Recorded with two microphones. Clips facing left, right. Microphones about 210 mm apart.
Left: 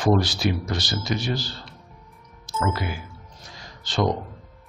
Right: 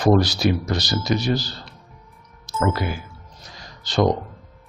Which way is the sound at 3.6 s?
40° right (ahead or behind).